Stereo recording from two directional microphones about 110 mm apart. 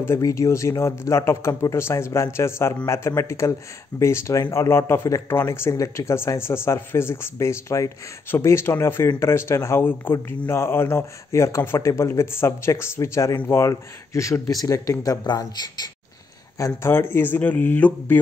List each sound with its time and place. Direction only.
0.0 s speech: 25° left (ahead or behind)
16.5 s speech: 25° left (ahead or behind)